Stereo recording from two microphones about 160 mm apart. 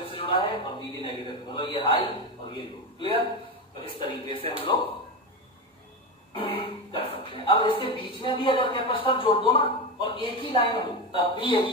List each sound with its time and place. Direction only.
0.0 s a sound: 35° left (ahead or behind)
1.5 s speech: 30° left (ahead or behind)
6.3 s speech: 30° left (ahead or behind)